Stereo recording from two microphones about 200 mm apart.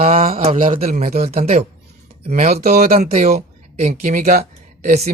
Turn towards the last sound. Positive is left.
turn(degrees=-35)  # may be behind; listen again after turning